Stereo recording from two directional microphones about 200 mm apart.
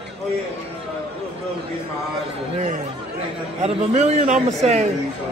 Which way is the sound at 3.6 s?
35° right (ahead or behind).